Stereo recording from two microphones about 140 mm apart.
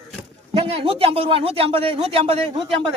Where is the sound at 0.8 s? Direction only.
45° right (ahead or behind).